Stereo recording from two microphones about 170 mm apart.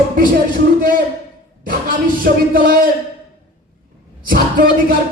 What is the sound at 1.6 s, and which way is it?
A man's voice, 55° right (ahead or behind).